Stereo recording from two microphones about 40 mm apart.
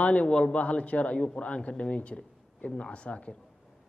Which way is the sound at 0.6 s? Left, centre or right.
Left.